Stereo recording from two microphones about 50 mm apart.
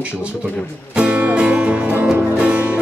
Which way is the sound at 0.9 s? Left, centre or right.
Right.